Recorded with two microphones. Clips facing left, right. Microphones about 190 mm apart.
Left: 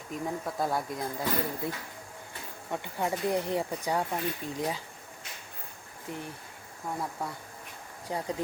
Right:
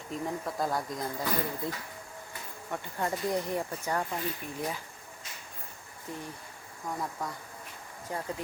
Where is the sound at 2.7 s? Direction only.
15° left (ahead or behind).